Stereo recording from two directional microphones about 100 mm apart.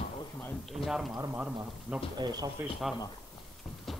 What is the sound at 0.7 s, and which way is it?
Speech, centre (ahead or behind).